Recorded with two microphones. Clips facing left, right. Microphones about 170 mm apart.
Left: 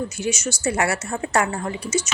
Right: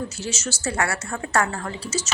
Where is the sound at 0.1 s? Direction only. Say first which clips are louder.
Left 5 dB; 15° left (ahead or behind).